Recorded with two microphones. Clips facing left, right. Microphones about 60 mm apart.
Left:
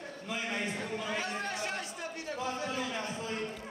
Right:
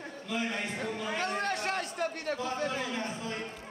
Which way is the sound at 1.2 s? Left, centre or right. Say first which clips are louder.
Right 4 dB; right.